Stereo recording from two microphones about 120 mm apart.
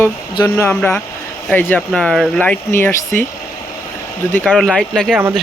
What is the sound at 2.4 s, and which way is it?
Speech, 15° left (ahead or behind).